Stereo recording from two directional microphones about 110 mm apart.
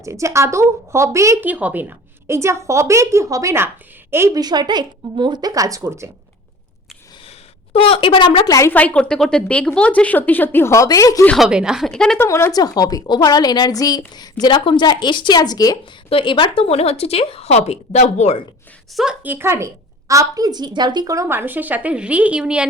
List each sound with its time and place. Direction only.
0.0 s speech: 25° right (ahead or behind)
1.4 s speech: 15° right (ahead or behind)
4.4 s speech: 40° right (ahead or behind)
7.7 s a woman's voice: 55° left (ahead or behind)
8.4 s a woman's voice: 30° left (ahead or behind)
8.7 s a woman's voice: 15° left (ahead or behind); by 11.3 s 30° left (ahead or behind)
11.3 s a woman's voice: 5° right (ahead or behind)
12.2 s a woman's voice: 25° left (ahead or behind)
16.0 s speech: 55° left (ahead or behind); by 18.3 s 85° left
19.2 s speech: 20° right (ahead or behind)